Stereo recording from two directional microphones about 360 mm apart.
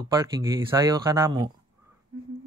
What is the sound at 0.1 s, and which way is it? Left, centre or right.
Speech, centre.